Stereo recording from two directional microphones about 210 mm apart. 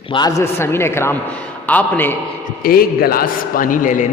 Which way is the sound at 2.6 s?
45° left (ahead or behind).